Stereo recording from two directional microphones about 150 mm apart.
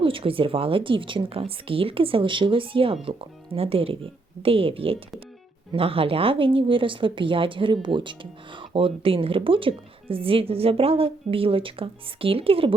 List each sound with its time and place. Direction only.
0.0 s speech: 35° right (ahead or behind)